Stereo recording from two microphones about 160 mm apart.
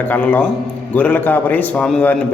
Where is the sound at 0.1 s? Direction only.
10° left (ahead or behind).